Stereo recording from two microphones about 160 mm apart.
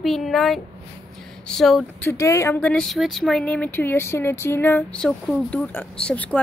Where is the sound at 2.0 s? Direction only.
20° left (ahead or behind).